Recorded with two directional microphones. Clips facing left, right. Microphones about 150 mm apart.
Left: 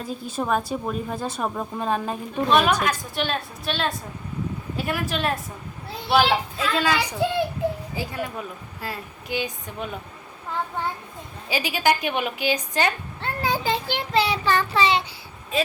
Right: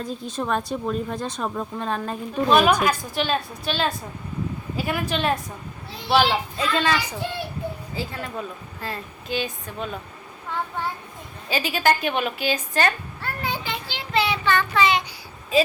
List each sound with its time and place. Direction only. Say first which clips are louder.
0.0 s a woman's voice: even; 5° left (ahead or behind)
7.9 s a woman's voice: left 1 dB; 15° left (ahead or behind)
11.4 s a woman's voice: right 1 dB; 15° left (ahead or behind)
13.4 s child singing: left 6 dB; 35° left (ahead or behind)
15.5 s a woman's voice: right 5 dB; centre (ahead or behind)